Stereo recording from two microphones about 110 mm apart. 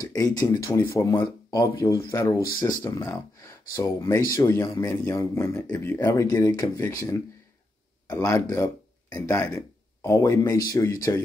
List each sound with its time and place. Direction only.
0.0 s speech: 30° left (ahead or behind)